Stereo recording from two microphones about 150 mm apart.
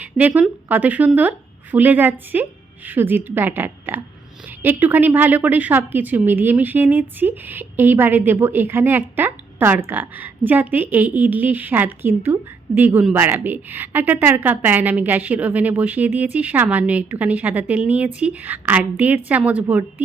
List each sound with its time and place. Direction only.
0.0 s a woman's voice: 10° right (ahead or behind)